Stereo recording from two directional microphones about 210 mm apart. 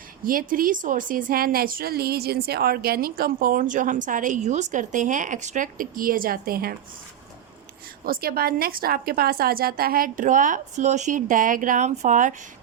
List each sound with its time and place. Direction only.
0.3 s a woman's voice: 40° right (ahead or behind)
8.0 s a woman's voice: 45° right (ahead or behind)